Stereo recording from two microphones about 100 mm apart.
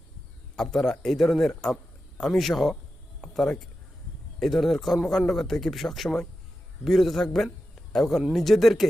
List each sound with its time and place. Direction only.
0.5 s a man's voice: 5° left (ahead or behind)